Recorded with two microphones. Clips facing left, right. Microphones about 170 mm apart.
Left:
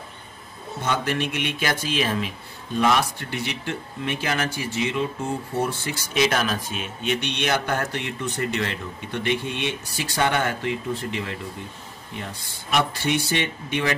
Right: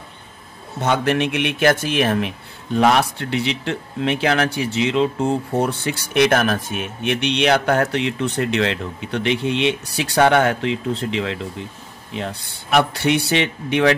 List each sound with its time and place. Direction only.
0.8 s speech: 70° right (ahead or behind)
12.2 s speech: 65° right (ahead or behind)